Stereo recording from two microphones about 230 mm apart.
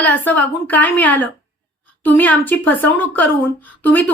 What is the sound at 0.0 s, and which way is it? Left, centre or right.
A woman's voice, centre.